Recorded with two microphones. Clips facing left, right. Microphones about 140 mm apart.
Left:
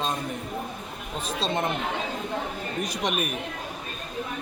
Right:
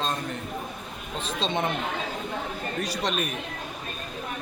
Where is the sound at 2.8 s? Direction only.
15° left (ahead or behind).